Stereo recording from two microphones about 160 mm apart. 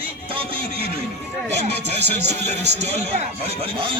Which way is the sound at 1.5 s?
45° right (ahead or behind).